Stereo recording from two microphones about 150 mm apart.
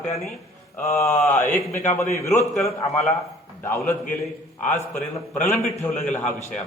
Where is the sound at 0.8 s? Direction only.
20° left (ahead or behind).